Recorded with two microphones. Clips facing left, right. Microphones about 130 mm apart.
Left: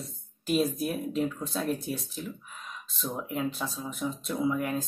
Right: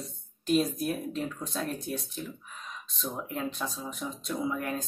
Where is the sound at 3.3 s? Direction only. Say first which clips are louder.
Left 4 dB; 5° left (ahead or behind).